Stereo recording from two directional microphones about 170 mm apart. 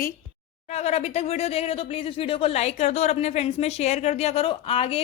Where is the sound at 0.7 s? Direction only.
40° left (ahead or behind).